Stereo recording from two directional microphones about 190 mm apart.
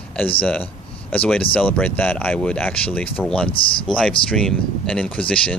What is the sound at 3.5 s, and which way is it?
Speech, 25° left (ahead or behind).